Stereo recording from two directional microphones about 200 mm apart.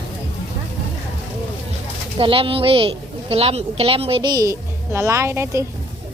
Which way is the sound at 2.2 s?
25° right (ahead or behind).